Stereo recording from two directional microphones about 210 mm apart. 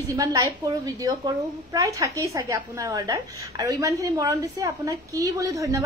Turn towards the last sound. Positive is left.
turn(degrees=-15)  # may be behind; listen again after turning